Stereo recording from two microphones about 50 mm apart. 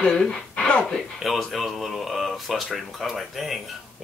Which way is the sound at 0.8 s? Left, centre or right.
Centre.